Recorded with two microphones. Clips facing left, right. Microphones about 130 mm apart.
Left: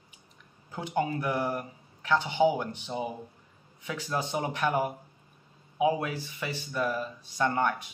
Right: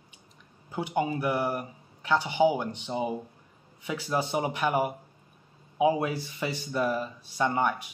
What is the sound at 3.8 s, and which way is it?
Speech, 15° right (ahead or behind).